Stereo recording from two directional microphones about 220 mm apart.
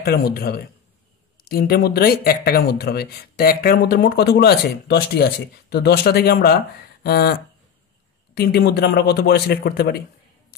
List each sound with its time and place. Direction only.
0.0 s speech: 45° left (ahead or behind)
8.4 s speech: 45° left (ahead or behind)